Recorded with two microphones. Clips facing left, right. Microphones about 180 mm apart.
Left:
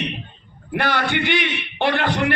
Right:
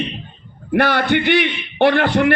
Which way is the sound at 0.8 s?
50° right (ahead or behind).